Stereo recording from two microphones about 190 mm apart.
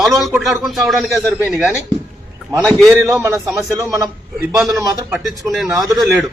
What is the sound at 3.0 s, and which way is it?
Speech, 10° right (ahead or behind).